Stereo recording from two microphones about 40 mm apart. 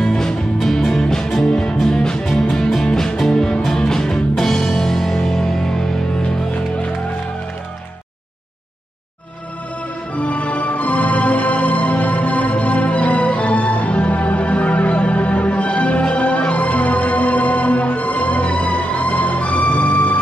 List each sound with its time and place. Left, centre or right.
0.0 s music: centre
1.5 s music: centre
2.2 s music: centre
2.9 s music: centre
6.2 s music: left
10.1 s music: left